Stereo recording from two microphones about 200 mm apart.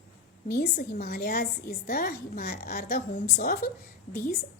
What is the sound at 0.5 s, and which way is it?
A woman's voice, 50° left (ahead or behind).